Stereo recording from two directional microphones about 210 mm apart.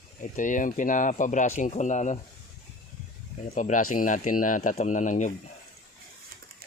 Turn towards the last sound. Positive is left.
turn(degrees=35)  # may be behind; listen again after turning